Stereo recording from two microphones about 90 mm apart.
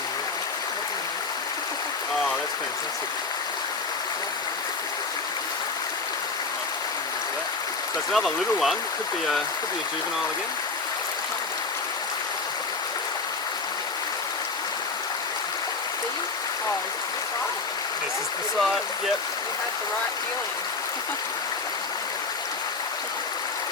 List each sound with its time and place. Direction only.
8.1 s speech: 5° left (ahead or behind)